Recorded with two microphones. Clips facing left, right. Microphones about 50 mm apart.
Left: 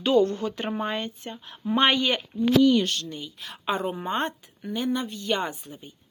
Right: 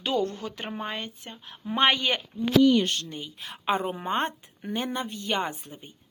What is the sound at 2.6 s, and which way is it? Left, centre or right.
A woman's voice, right.